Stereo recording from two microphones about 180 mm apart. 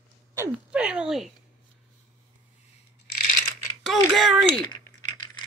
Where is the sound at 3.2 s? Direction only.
50° left (ahead or behind).